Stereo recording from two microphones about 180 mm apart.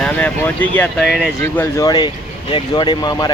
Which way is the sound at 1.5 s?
20° left (ahead or behind).